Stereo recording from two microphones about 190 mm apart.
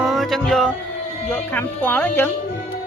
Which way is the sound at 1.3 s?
10° left (ahead or behind).